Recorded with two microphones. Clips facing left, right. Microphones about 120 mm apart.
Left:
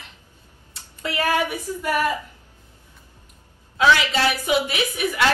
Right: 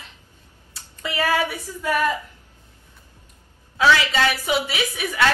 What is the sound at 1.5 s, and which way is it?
Speech, 15° left (ahead or behind).